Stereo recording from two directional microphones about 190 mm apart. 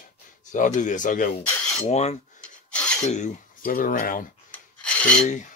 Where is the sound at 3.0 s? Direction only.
35° left (ahead or behind).